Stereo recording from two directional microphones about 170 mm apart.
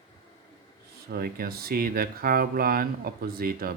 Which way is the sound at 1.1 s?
60° right (ahead or behind).